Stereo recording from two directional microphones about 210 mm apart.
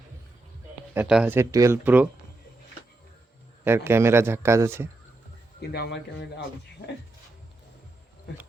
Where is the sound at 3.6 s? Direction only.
10° right (ahead or behind).